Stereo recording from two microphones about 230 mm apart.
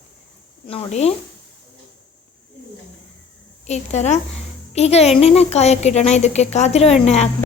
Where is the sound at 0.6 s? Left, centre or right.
Left.